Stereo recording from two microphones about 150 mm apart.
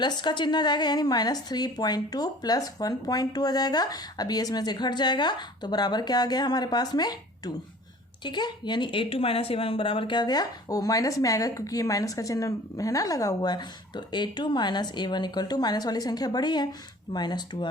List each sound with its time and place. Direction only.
0.0 s speech: 30° left (ahead or behind)